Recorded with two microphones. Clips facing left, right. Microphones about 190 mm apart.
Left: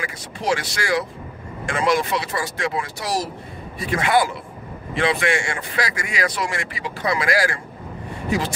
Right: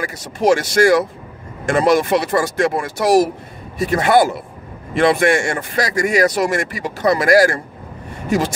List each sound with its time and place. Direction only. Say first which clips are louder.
0.0 s a man's voice: right 9 dB; 45° right (ahead or behind)
3.8 s a man's voice: right 6 dB; 40° right (ahead or behind)